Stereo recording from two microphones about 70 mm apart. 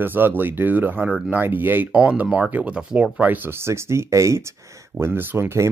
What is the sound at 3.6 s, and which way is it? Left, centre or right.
Speech, right.